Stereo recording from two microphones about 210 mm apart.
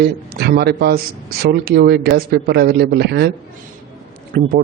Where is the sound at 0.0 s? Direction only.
50° right (ahead or behind).